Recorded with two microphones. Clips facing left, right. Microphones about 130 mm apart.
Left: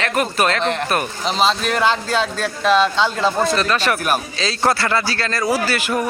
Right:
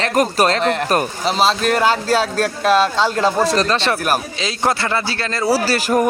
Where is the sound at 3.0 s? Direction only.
5° right (ahead or behind).